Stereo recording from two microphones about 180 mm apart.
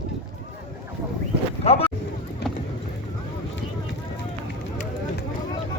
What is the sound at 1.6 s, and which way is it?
Speech, 35° left (ahead or behind).